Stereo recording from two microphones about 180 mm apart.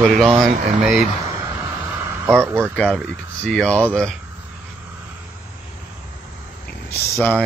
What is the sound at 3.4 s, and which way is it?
Speech, 5° left (ahead or behind).